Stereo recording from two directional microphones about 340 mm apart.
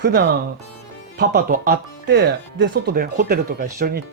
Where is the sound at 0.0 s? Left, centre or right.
Right.